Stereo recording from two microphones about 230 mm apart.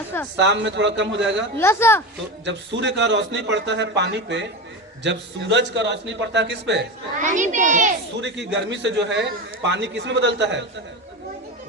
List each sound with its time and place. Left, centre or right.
0.3 s a man's voice: right
1.5 s speech: centre
2.4 s a man's voice: right
7.2 s a child's voice: right
8.2 s a man's voice: right